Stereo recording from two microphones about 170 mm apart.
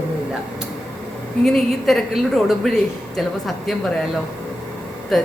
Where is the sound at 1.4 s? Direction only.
Centre (ahead or behind).